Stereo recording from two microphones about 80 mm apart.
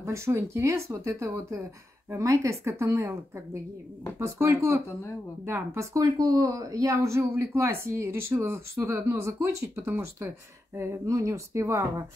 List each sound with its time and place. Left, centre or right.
0.0 s speech: right